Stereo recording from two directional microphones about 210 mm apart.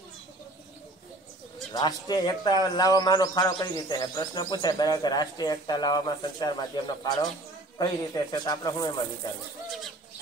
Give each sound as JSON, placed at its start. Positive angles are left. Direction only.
{"t": 1.7, "sound": "speech", "side_deg": 20}